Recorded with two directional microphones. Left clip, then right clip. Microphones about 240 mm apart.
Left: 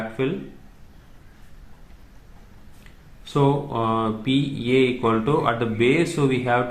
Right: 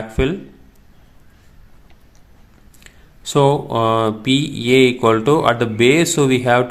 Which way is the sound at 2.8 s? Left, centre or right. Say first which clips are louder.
Right 12 dB; right.